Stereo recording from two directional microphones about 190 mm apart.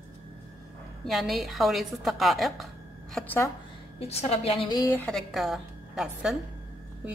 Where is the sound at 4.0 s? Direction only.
35° left (ahead or behind).